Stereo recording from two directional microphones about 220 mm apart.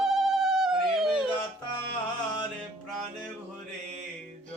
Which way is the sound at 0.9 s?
Centre (ahead or behind).